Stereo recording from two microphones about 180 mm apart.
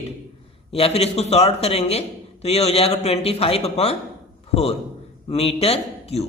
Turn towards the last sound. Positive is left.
turn(degrees=35)  # may be behind; listen again after turning